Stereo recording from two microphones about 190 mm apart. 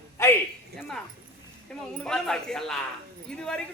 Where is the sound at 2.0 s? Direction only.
5° left (ahead or behind).